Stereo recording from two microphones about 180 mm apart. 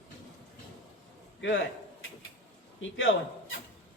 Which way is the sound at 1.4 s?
90° left.